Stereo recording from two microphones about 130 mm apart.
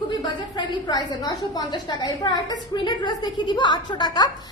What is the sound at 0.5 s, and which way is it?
A woman's voice, 30° left (ahead or behind).